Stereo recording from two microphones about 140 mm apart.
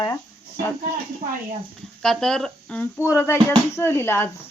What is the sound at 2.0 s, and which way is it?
Speech, 5° left (ahead or behind).